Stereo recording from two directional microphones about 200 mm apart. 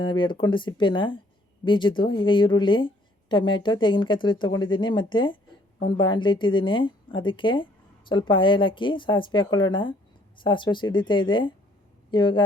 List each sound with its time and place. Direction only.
0.0 s a woman's voice: 25° left (ahead or behind)